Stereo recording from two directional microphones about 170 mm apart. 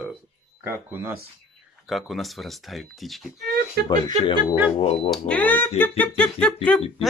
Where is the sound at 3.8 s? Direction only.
25° left (ahead or behind).